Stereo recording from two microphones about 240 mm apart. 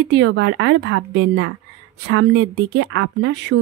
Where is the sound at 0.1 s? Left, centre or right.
Right.